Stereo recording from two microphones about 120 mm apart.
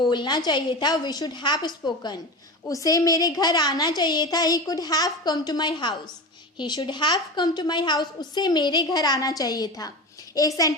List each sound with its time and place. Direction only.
0.1 s a woman's voice: 35° left (ahead or behind)